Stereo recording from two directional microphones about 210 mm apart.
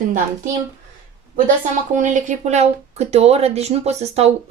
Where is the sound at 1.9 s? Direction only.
35° right (ahead or behind).